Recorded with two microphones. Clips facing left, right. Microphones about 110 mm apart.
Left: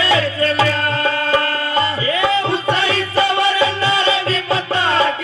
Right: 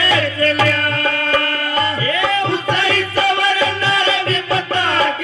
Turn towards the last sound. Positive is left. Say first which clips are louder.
# left 1 dB
turn(degrees=25)  # may be behind; listen again after turning